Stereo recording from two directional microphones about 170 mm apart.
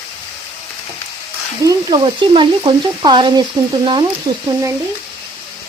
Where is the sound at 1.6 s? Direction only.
25° right (ahead or behind).